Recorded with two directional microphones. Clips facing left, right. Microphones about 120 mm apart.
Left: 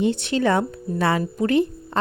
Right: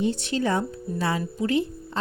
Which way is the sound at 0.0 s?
70° left (ahead or behind).